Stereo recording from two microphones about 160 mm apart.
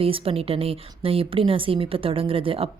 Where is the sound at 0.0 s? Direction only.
35° right (ahead or behind).